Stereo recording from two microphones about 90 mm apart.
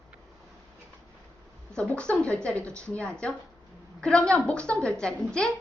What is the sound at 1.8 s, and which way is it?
A woman's voice, 15° left (ahead or behind).